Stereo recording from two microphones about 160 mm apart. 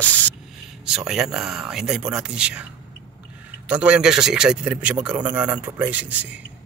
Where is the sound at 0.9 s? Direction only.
5° right (ahead or behind).